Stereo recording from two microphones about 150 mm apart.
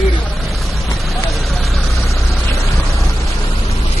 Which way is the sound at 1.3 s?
Centre (ahead or behind).